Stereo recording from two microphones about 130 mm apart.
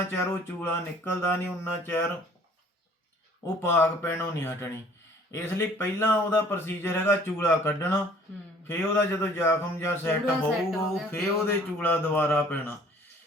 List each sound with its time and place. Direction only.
0.0 s a man's voice: 20° left (ahead or behind)
3.4 s a man's voice: 20° left (ahead or behind)
10.7 s speech: centre (ahead or behind)
11.1 s a man's voice: 15° left (ahead or behind)